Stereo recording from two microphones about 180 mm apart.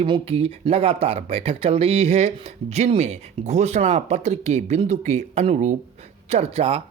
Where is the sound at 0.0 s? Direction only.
30° right (ahead or behind).